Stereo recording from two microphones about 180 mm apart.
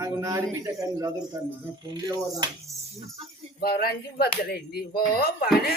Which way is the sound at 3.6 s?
60° left (ahead or behind).